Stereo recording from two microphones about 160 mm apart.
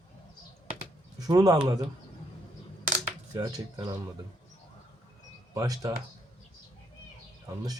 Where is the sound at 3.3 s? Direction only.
25° right (ahead or behind).